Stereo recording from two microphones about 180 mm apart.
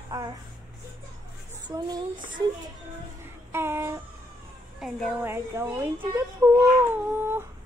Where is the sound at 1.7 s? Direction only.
25° right (ahead or behind).